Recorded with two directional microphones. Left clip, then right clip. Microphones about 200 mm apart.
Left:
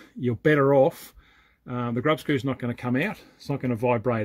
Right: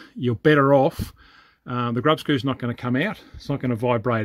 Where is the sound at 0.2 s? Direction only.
25° right (ahead or behind).